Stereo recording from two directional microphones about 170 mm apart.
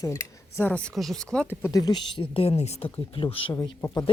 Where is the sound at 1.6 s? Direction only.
20° left (ahead or behind).